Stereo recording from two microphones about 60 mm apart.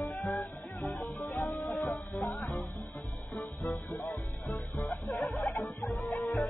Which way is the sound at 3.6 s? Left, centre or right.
Left.